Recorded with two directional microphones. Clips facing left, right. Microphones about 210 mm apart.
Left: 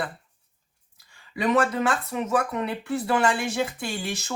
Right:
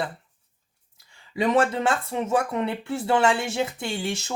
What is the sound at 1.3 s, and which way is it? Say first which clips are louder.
Speech: right 1 dB; 25° right (ahead or behind).